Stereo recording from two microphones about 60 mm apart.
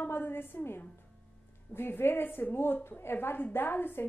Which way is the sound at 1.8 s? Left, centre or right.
Left.